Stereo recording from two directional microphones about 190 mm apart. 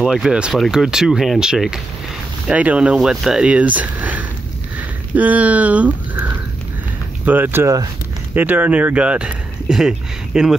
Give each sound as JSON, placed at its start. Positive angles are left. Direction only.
{"t": 0.0, "sound": "speech", "side_deg": -5}
{"t": 7.2, "sound": "speech", "side_deg": -10}